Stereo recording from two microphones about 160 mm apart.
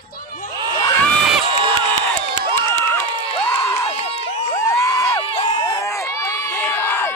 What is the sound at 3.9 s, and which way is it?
Run, 40° left (ahead or behind).